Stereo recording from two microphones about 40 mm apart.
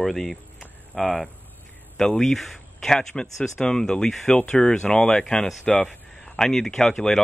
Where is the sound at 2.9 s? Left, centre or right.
Centre.